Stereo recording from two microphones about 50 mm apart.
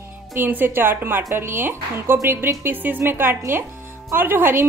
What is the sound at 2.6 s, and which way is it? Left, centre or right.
A woman's voice, right.